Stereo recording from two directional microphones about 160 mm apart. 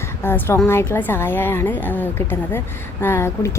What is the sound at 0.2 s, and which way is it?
A woman's voice, 15° left (ahead or behind).